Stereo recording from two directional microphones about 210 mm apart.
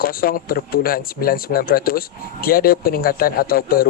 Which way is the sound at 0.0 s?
45° left (ahead or behind).